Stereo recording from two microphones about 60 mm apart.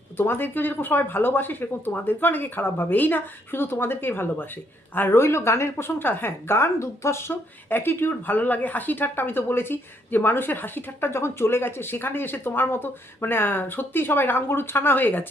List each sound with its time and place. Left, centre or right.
0.2 s a woman's voice: left